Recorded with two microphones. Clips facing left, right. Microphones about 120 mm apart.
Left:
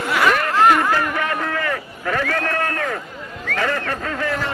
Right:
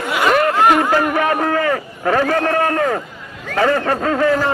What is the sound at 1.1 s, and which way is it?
A man's voice, 40° right (ahead or behind).